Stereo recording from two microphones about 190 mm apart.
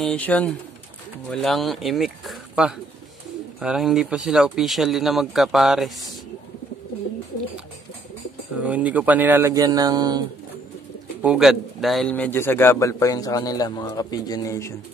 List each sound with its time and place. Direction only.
0.0 s speech: 5° left (ahead or behind)
8.6 s speech: 5° right (ahead or behind)
11.2 s a man's voice: centre (ahead or behind); by 14.7 s 15° left (ahead or behind)